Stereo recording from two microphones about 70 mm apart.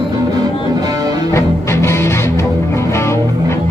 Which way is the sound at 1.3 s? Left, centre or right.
Left.